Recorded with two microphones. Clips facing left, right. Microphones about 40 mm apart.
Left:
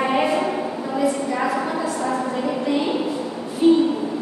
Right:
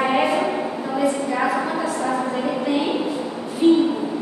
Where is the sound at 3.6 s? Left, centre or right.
Centre.